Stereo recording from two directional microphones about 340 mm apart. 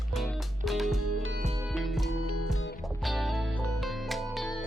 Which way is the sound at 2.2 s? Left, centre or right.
Left.